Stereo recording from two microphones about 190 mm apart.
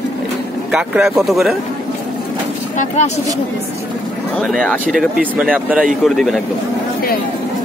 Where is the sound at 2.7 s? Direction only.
40° left (ahead or behind).